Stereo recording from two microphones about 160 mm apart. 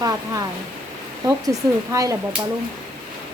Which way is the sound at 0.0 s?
20° right (ahead or behind).